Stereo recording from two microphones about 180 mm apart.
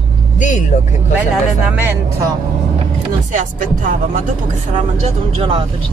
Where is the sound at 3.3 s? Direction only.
45° right (ahead or behind).